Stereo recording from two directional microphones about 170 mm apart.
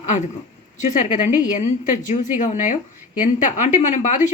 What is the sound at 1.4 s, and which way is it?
A woman's voice, 50° left (ahead or behind).